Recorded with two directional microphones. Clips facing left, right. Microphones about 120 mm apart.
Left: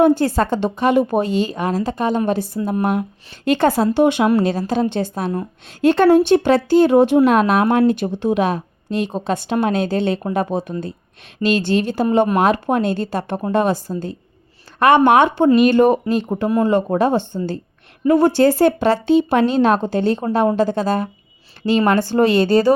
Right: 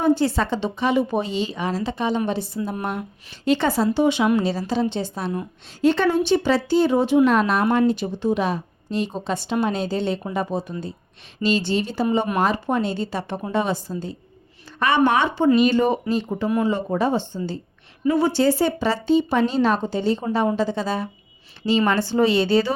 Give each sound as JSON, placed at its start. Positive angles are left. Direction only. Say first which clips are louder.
{"t": 0.0, "sound": "a woman's voice", "louder": "left 5 dB", "side_deg": 50}